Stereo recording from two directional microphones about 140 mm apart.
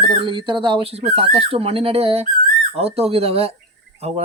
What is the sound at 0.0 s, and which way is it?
Speech, 35° right (ahead or behind).